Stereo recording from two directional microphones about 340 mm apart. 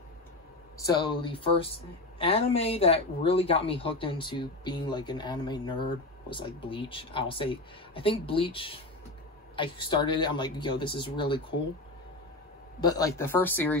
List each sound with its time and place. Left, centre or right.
0.7 s speech: centre
12.8 s speech: centre